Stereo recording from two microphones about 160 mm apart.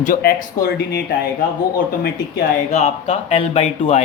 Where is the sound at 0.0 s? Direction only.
65° left (ahead or behind).